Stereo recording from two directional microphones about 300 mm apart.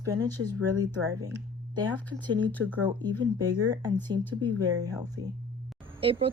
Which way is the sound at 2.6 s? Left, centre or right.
Centre.